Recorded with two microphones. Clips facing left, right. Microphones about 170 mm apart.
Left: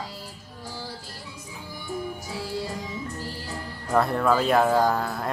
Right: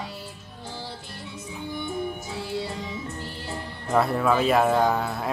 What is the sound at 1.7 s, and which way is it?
Music, 20° right (ahead or behind).